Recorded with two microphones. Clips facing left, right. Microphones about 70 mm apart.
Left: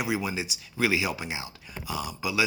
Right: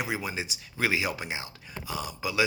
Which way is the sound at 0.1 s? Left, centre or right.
Right.